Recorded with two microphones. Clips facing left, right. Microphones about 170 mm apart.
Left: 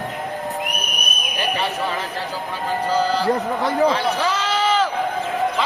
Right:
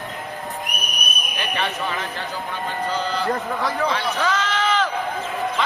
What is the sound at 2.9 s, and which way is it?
Speech, 35° left (ahead or behind).